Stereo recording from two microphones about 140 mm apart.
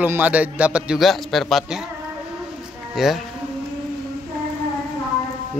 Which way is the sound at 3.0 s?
Centre (ahead or behind).